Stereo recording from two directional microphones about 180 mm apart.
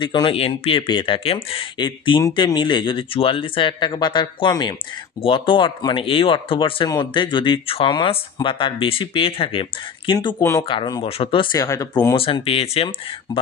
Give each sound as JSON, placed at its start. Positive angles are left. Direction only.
{"t": 0.0, "sound": "speech", "side_deg": 25}